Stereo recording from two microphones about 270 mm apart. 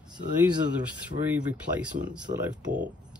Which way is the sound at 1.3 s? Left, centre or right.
Centre.